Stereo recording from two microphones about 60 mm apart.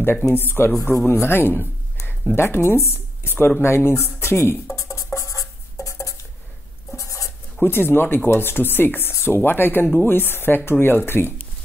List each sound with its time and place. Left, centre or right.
0.0 s speech: left
2.3 s a sound: left
7.0 s writing: left
7.6 s speech: left